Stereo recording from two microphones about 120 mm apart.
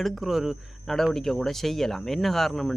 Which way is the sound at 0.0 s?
Centre (ahead or behind).